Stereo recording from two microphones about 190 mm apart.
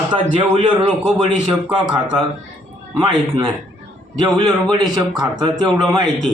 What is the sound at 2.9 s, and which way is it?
Speech, 25° right (ahead or behind).